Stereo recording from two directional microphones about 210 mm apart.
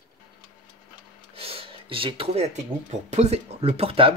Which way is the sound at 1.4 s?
25° right (ahead or behind).